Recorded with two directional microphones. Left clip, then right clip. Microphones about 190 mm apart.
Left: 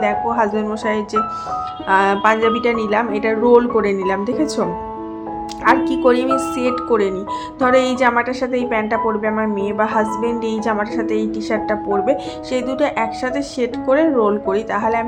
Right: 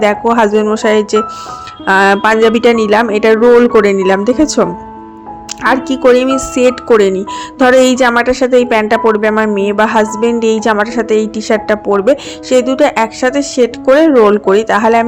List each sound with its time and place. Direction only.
0.0 s a woman's voice: 40° right (ahead or behind)